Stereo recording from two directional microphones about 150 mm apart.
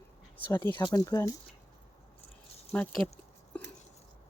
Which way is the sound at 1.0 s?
20° left (ahead or behind).